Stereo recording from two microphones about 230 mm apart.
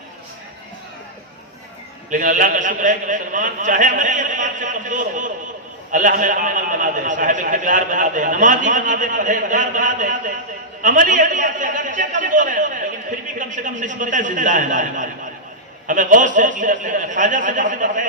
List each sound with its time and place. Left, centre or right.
2.0 s a man's voice: right